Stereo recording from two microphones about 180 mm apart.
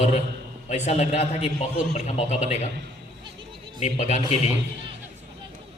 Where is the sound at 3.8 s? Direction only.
40° left (ahead or behind).